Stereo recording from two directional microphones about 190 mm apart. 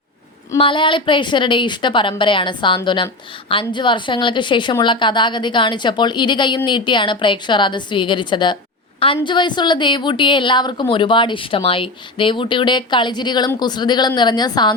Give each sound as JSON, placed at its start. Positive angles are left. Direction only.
{"t": 0.5, "sound": "a woman's voice", "side_deg": 25}